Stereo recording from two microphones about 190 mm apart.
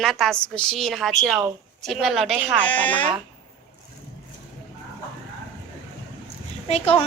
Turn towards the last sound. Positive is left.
turn(degrees=30)  # may be behind; listen again after turning